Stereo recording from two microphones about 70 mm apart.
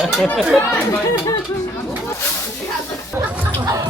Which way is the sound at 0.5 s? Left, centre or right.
Left.